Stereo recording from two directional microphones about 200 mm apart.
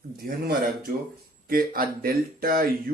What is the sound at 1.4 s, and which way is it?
Speech, 45° right (ahead or behind).